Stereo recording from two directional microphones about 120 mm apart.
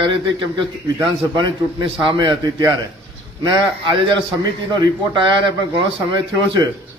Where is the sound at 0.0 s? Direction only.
45° right (ahead or behind).